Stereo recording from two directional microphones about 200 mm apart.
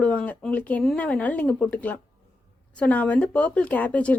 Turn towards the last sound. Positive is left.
turn(degrees=5)  # may be behind; listen again after turning